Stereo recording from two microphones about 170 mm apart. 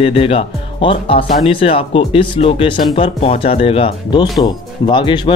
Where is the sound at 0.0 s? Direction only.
35° left (ahead or behind).